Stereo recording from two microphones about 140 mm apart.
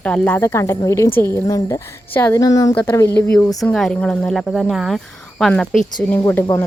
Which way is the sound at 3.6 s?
5° left (ahead or behind).